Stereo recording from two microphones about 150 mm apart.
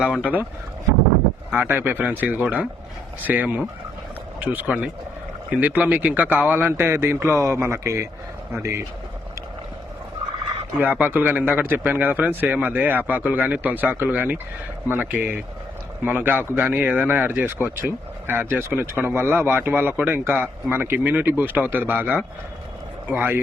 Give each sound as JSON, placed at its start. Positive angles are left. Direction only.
{"t": 0.0, "sound": "a man's voice", "side_deg": -5}
{"t": 1.5, "sound": "a man's voice", "side_deg": -15}
{"t": 10.8, "sound": "a man's voice", "side_deg": -10}